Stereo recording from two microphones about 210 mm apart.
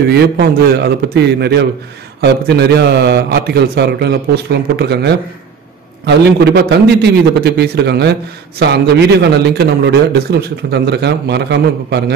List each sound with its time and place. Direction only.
0.1 s a man's voice: 50° right (ahead or behind)